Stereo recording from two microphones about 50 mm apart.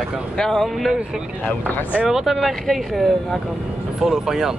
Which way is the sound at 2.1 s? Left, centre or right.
Centre.